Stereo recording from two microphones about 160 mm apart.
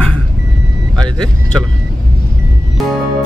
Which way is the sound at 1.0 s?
5° left (ahead or behind).